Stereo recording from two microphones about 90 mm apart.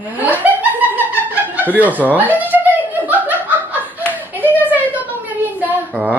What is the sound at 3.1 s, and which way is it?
Laughter, 20° right (ahead or behind).